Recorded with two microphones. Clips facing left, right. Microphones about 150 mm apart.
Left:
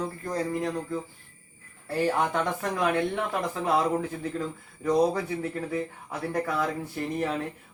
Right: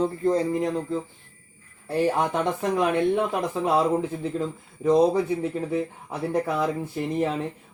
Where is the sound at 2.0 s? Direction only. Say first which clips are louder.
Right 2 dB; 20° right (ahead or behind).